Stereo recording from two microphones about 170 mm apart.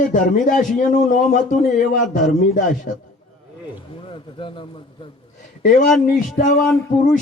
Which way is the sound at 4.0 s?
30° left (ahead or behind).